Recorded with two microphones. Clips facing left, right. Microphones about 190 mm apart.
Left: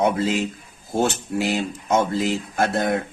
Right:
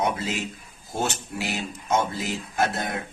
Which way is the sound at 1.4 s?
50° left (ahead or behind).